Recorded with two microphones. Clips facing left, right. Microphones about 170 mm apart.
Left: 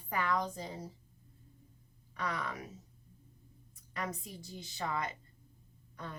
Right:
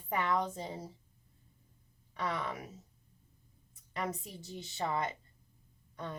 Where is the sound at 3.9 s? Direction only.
25° right (ahead or behind).